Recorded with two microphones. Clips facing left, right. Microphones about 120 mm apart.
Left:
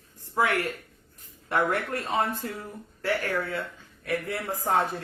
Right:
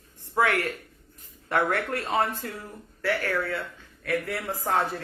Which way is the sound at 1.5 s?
15° left (ahead or behind).